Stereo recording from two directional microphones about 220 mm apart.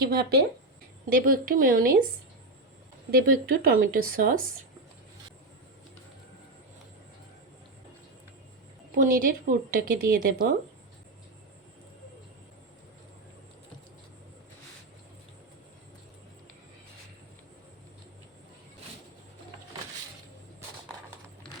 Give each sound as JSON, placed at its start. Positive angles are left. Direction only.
{"t": 0.0, "sound": "speech", "side_deg": -45}
{"t": 3.1, "sound": "speech", "side_deg": -40}
{"t": 9.0, "sound": "speech", "side_deg": -40}